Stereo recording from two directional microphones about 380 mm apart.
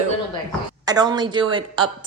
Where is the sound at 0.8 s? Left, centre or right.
Centre.